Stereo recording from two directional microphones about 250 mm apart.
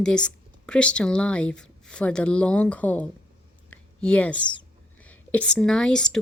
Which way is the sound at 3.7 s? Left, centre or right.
Centre.